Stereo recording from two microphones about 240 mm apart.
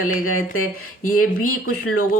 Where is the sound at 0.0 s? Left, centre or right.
Left.